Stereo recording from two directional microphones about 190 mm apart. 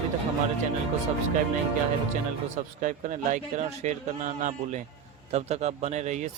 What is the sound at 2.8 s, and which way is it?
A man's voice, 40° right (ahead or behind).